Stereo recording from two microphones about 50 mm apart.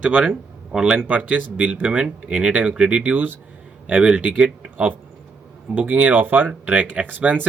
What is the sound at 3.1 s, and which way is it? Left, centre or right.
Speech, right.